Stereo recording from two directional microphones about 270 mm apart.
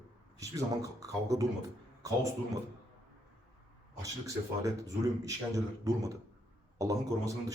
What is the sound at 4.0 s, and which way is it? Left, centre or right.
Speech, centre.